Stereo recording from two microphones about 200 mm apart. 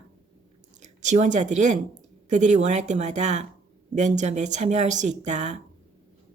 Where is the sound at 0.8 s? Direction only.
35° right (ahead or behind).